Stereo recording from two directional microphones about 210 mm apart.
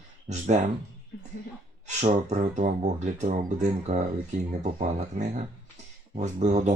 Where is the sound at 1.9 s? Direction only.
35° right (ahead or behind).